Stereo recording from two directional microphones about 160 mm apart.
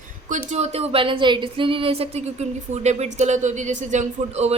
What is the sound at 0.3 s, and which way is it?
A woman's voice, 45° right (ahead or behind).